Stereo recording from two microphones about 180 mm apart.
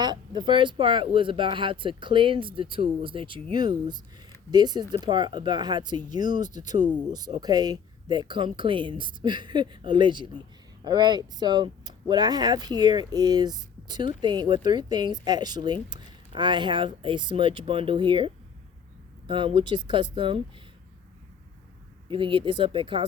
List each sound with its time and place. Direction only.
0.0 s speech: 25° right (ahead or behind)
19.3 s speech: 25° right (ahead or behind)
22.1 s speech: 30° right (ahead or behind)